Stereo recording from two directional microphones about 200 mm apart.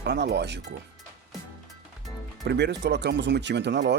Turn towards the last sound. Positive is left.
turn(degrees=-60)  # may be behind; listen again after turning